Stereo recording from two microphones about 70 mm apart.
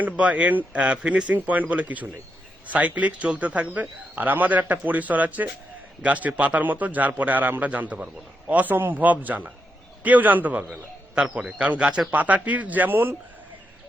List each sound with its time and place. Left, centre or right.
0.0 s a man's voice: right
12.1 s a man's voice: right